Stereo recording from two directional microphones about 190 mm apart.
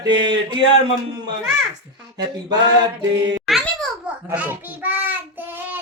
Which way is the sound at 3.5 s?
Centre (ahead or behind).